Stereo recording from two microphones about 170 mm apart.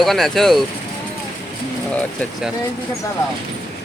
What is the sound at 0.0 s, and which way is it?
Speech, centre (ahead or behind).